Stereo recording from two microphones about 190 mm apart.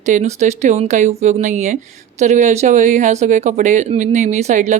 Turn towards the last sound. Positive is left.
turn(degrees=-40)  # may be behind; listen again after turning